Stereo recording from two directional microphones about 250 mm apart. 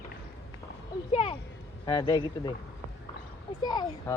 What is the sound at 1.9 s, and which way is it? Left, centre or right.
Speech, centre.